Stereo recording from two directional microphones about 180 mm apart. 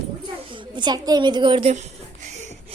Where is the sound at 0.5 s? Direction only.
25° right (ahead or behind).